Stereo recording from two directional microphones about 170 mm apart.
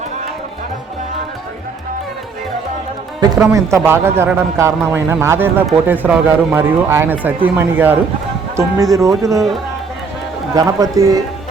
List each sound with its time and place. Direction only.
3.3 s a man's voice: 20° right (ahead or behind)
10.5 s speech: 20° right (ahead or behind)